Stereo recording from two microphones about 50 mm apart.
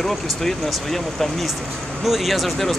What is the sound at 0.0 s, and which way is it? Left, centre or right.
Speech, centre.